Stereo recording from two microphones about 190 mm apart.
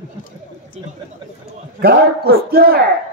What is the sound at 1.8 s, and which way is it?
Speech, 55° right (ahead or behind).